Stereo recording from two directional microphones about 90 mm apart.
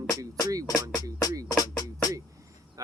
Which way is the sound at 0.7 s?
45° left (ahead or behind).